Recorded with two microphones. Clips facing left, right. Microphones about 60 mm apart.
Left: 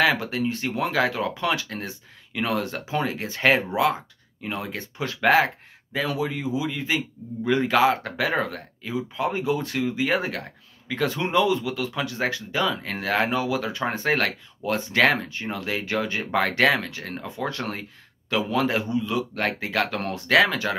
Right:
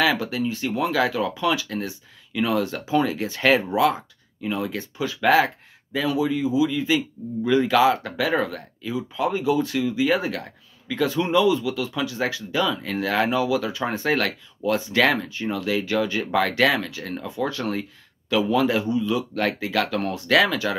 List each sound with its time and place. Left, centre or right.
0.0 s speech: left